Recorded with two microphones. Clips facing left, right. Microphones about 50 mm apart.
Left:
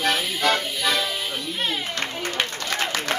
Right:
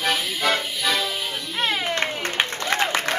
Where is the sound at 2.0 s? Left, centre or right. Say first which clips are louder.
Right 2 dB; right.